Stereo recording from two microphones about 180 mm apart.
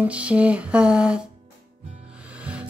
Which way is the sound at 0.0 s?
5° right (ahead or behind).